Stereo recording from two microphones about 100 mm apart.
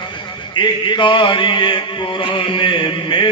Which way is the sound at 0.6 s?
55° left (ahead or behind).